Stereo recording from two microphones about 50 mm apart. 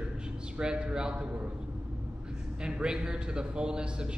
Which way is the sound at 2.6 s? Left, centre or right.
Centre.